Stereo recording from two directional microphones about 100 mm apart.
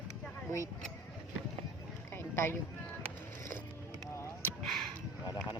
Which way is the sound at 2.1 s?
25° left (ahead or behind).